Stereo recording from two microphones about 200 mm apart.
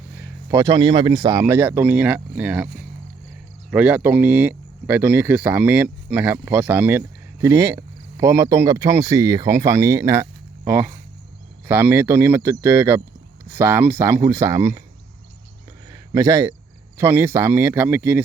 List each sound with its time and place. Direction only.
0.4 s speech: 15° right (ahead or behind)
3.7 s speech: 5° right (ahead or behind)
15.9 s speech: 15° right (ahead or behind)